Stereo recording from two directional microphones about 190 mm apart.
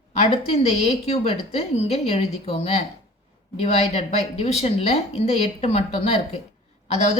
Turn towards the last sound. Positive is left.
turn(degrees=35)  # may be behind; listen again after turning